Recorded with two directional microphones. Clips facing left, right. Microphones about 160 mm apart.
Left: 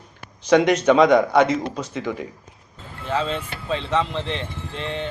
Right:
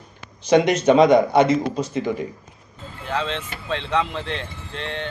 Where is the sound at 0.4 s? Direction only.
25° right (ahead or behind).